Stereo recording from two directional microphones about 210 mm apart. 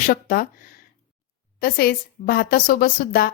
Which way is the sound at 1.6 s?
45° left (ahead or behind).